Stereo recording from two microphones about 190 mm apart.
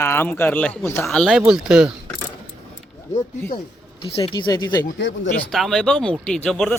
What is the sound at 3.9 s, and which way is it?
Speech, 30° left (ahead or behind).